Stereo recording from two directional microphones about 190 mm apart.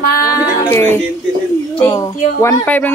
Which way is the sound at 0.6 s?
15° left (ahead or behind).